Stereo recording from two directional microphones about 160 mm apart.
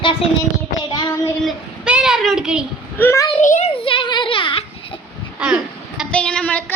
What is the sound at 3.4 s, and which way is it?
Speech, 55° left (ahead or behind).